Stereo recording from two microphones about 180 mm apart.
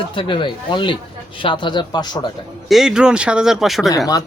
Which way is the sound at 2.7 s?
5° right (ahead or behind).